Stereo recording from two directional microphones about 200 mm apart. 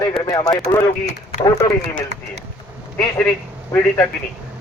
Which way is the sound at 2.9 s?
10° left (ahead or behind).